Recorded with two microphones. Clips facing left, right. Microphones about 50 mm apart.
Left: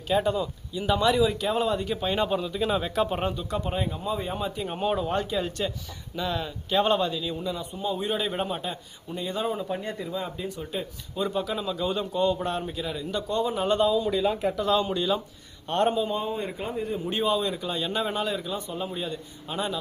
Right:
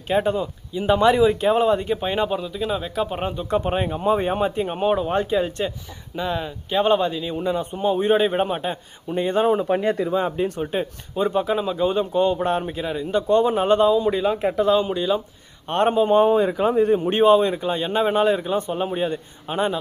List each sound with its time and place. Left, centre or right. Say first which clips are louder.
0.1 s speech: right 4 dB; right
2.2 s speech: right 2 dB; centre
3.5 s speech: right 7 dB; right
4.7 s speech: right 2 dB; right
9.8 s speech: right 11 dB; right
11.1 s speech: right 7 dB; right
13.7 s speech: right 6 dB; right
14.7 s speech: right 4 dB; centre
15.6 s speech: right 6 dB; right
16.1 s speech: right 13 dB; right